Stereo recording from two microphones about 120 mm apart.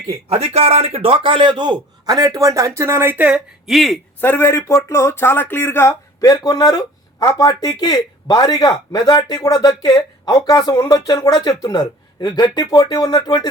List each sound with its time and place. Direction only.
0.3 s a man's voice: 60° right (ahead or behind); by 3.4 s 15° right (ahead or behind)
3.7 s a man's voice: centre (ahead or behind)
4.2 s speech: 20° left (ahead or behind)